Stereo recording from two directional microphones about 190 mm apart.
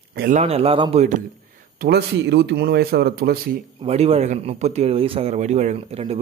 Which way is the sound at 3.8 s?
30° right (ahead or behind).